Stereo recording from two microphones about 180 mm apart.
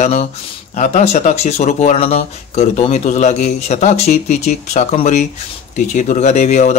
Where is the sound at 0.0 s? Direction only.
35° left (ahead or behind).